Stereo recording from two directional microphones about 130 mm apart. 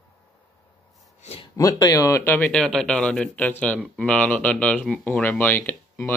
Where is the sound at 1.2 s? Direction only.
55° left (ahead or behind).